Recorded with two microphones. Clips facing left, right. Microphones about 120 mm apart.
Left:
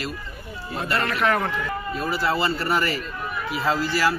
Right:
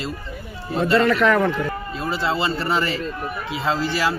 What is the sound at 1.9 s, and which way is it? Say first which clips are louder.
A man's voice: even; 20° right (ahead or behind).